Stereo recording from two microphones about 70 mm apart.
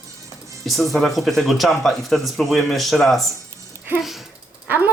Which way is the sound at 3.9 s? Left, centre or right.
Centre.